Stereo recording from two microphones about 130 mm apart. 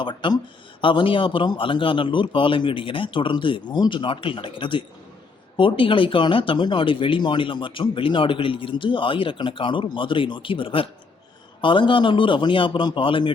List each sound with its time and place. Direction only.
0.0 s speech: 35° left (ahead or behind)